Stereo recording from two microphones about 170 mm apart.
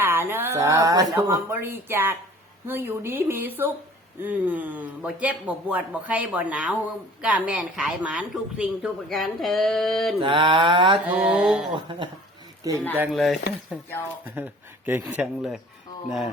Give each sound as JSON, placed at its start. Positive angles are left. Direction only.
{"t": 0.0, "sound": "a man's voice", "side_deg": -15}
{"t": 10.2, "sound": "speech", "side_deg": -30}
{"t": 10.9, "sound": "speech", "side_deg": -5}
{"t": 13.1, "sound": "speech", "side_deg": 0}
{"t": 14.3, "sound": "a man's voice", "side_deg": -10}